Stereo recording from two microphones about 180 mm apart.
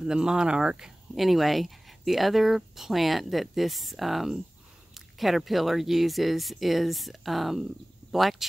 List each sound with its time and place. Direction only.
0.0 s speech: 5° right (ahead or behind)